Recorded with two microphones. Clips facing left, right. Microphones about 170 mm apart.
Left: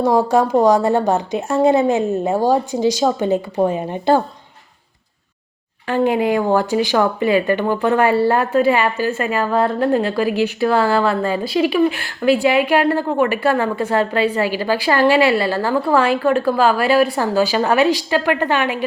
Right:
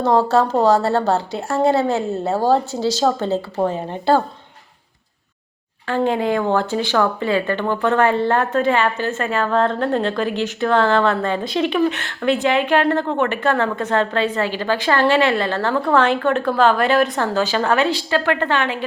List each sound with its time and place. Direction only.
0.0 s speech: 10° left (ahead or behind)
5.9 s speech: 10° left (ahead or behind)